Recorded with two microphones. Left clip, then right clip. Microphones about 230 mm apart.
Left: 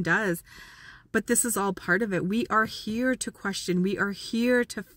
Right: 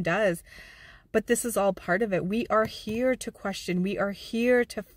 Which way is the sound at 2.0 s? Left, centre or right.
Centre.